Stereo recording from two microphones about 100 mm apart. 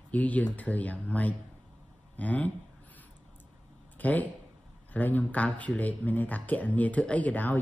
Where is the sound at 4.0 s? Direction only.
15° left (ahead or behind).